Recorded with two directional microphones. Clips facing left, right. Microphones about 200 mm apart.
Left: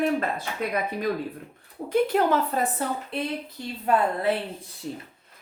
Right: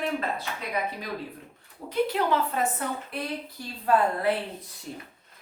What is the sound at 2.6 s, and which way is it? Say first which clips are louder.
Speech: left 2 dB; 30° left (ahead or behind).